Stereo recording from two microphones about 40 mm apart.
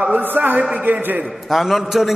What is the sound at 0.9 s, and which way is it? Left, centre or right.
Speech, right.